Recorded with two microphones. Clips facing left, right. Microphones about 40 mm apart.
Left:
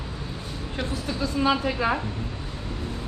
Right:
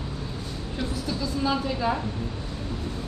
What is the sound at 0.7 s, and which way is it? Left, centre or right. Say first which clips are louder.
A woman's voice: left 1 dB; left.